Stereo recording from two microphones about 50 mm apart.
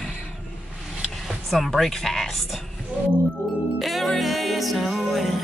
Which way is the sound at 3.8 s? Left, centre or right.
Centre.